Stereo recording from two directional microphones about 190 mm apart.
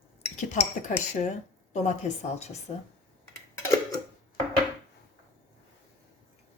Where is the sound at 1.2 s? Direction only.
35° left (ahead or behind).